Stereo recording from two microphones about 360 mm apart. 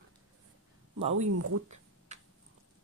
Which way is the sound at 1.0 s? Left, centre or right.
Centre.